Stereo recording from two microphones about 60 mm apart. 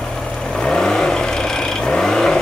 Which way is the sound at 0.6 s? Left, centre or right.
Centre.